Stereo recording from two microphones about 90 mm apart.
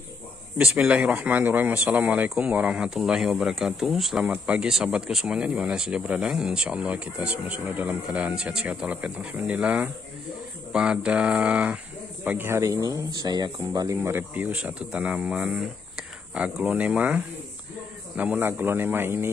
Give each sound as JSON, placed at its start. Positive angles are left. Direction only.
{"t": 0.7, "sound": "speech", "side_deg": -15}
{"t": 12.3, "sound": "speech", "side_deg": -25}
{"t": 14.0, "sound": "speech", "side_deg": -20}